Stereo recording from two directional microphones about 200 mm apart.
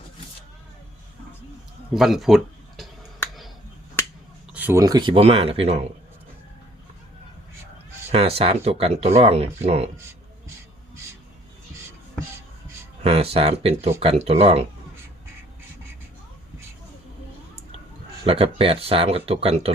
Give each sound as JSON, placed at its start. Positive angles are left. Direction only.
{"t": 1.9, "sound": "a sound", "side_deg": 0}
{"t": 4.5, "sound": "speech", "side_deg": -10}
{"t": 8.1, "sound": "speech", "side_deg": -30}
{"t": 13.0, "sound": "speech", "side_deg": -30}
{"t": 18.3, "sound": "speech", "side_deg": -30}